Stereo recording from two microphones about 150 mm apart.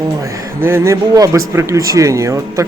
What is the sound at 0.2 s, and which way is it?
A man's voice, 20° right (ahead or behind).